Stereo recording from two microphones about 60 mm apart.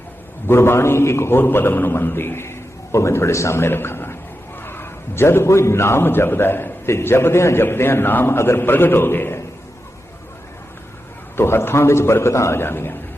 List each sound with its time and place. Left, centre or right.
0.4 s a man's voice: left
11.3 s a man's voice: left